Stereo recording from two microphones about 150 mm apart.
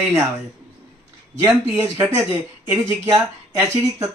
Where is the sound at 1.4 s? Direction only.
15° right (ahead or behind).